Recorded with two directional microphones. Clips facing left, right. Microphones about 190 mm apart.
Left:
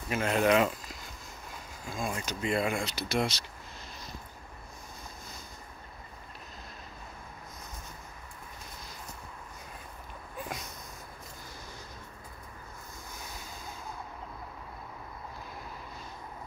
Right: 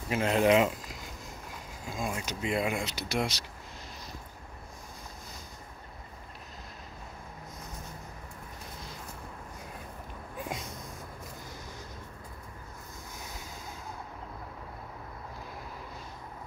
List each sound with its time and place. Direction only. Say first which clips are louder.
0.1 s speech: right 2 dB; 25° right (ahead or behind)